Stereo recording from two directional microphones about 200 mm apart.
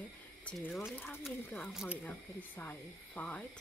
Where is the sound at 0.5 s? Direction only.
5° left (ahead or behind).